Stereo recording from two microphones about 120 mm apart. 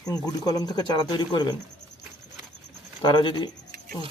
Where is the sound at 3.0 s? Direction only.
40° left (ahead or behind).